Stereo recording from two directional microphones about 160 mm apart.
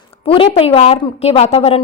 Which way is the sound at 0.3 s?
35° left (ahead or behind).